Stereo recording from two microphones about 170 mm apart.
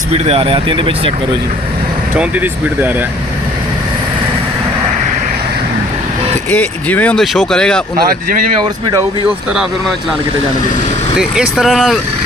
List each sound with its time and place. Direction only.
0.1 s speech: 35° right (ahead or behind)
2.1 s speech: 10° right (ahead or behind)
6.5 s speech: 10° left (ahead or behind)
7.9 s speech: 60° right (ahead or behind)
11.2 s speech: centre (ahead or behind)